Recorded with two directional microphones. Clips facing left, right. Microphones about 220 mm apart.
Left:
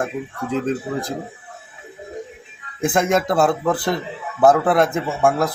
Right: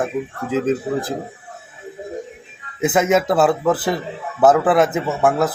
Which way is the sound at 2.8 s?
5° right (ahead or behind).